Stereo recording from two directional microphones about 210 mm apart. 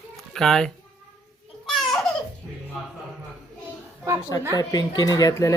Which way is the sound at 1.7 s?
Centre (ahead or behind).